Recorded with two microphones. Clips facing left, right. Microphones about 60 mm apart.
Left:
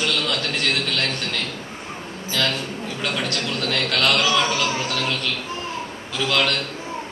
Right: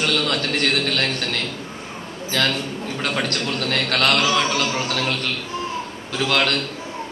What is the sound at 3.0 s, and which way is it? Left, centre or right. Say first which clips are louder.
A man's voice: right 2 dB; right.